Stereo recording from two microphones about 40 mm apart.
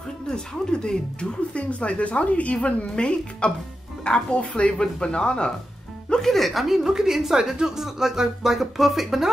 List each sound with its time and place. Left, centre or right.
0.3 s speech: centre
1.5 s speech: left
6.2 s a woman's voice: centre